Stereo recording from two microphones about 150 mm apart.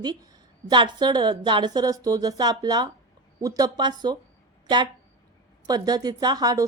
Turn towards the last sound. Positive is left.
turn(degrees=-25)  # may be behind; listen again after turning